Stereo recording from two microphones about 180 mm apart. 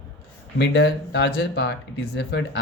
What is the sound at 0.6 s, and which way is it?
Speech, 70° left (ahead or behind).